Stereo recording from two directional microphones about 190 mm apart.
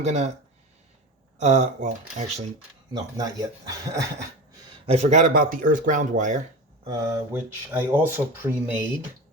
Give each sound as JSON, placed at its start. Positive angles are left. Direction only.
{"t": 0.0, "sound": "speech", "side_deg": -35}
{"t": 1.4, "sound": "speech", "side_deg": -40}
{"t": 2.9, "sound": "speech", "side_deg": -20}
{"t": 4.9, "sound": "speech", "side_deg": -35}
{"t": 6.8, "sound": "speech", "side_deg": -20}